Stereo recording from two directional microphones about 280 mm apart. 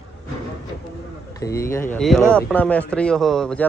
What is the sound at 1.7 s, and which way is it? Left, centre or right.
Speech, centre.